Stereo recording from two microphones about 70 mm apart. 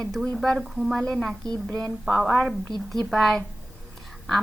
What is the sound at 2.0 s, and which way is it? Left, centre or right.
A woman's voice, centre.